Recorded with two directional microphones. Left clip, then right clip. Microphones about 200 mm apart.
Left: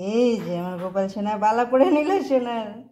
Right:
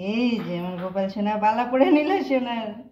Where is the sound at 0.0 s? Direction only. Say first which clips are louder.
Left 5 dB; 30° left (ahead or behind).